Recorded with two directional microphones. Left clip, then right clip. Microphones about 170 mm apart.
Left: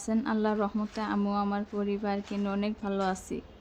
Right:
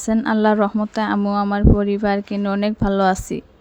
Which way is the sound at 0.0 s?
45° right (ahead or behind).